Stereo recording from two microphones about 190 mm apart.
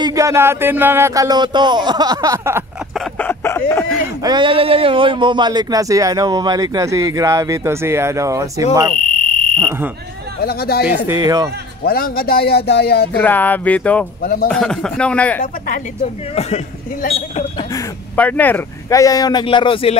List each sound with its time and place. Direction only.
0.0 s a sound: 15° right (ahead or behind)
3.2 s a sound: 10° left (ahead or behind)
4.2 s speech: 25° right (ahead or behind)
8.9 s fire alarm: 5° left (ahead or behind)
9.6 s speech: 15° right (ahead or behind)
10.4 s speech: 55° left (ahead or behind)
11.1 s a sound: 20° right (ahead or behind)
11.8 s speech: 50° left (ahead or behind)
13.1 s speech: 10° left (ahead or behind)
14.2 s speech: 50° left (ahead or behind)
14.5 s speech: 5° left (ahead or behind)
15.4 s speech: 45° left (ahead or behind)
16.0 s a man's voice: 35° left (ahead or behind)
17.7 s speech: 10° left (ahead or behind); by 20.0 s 30° left (ahead or behind)